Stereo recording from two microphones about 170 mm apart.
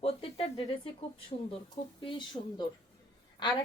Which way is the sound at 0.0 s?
35° left (ahead or behind).